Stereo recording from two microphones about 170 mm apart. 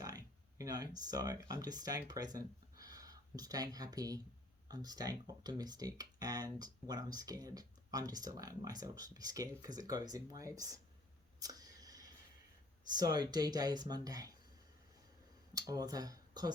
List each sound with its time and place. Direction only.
0.0 s speech: 20° right (ahead or behind)
11.3 s a sound: 20° right (ahead or behind)
12.9 s speech: 25° right (ahead or behind)
15.5 s speech: 20° right (ahead or behind)